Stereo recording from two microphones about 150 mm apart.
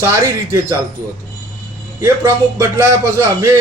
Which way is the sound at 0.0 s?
20° right (ahead or behind).